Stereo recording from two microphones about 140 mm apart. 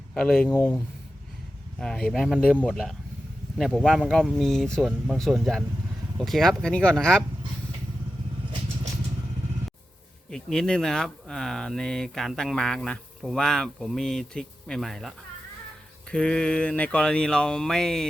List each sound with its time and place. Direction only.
0.1 s speech: centre (ahead or behind)
0.5 s speech: 15° left (ahead or behind)
1.8 s speech: 5° left (ahead or behind)
10.2 s speech: 5° left (ahead or behind)
16.1 s speech: 5° left (ahead or behind)